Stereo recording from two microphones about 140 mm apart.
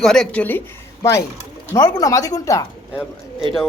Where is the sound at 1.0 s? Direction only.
20° left (ahead or behind).